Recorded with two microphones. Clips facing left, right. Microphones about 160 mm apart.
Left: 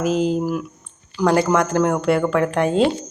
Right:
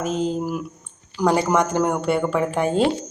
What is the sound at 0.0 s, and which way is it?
Speech, 5° left (ahead or behind).